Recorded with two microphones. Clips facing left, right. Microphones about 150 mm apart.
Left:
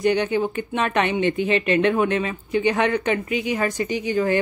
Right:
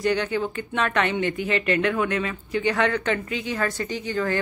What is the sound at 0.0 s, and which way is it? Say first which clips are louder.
Speech: left 3 dB; 20° left (ahead or behind).